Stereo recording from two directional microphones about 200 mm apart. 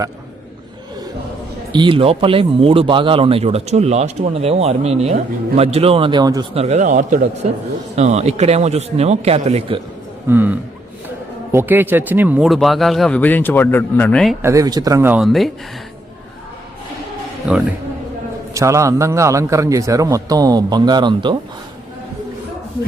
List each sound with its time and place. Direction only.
1.7 s speech: 25° right (ahead or behind)
6.5 s a man's voice: 30° right (ahead or behind)
10.2 s a man's voice: 10° right (ahead or behind)
14.4 s a man's voice: 15° right (ahead or behind); by 15.5 s centre (ahead or behind)
17.4 s speech: 5° right (ahead or behind)
18.5 s a man's voice: 15° right (ahead or behind)